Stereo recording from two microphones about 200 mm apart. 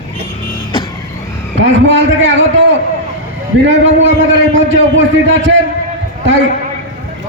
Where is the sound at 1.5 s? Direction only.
70° right (ahead or behind).